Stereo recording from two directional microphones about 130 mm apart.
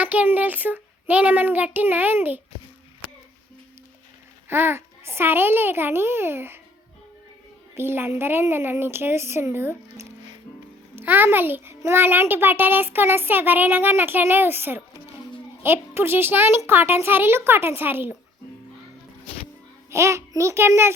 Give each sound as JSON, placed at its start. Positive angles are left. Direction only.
{"t": 0.0, "sound": "a child's voice", "side_deg": -15}
{"t": 4.4, "sound": "a child's voice", "side_deg": -15}
{"t": 7.8, "sound": "a child's voice", "side_deg": -15}
{"t": 19.9, "sound": "a child's voice", "side_deg": -20}